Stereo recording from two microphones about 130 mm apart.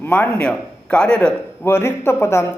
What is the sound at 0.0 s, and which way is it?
A man's voice, 15° left (ahead or behind).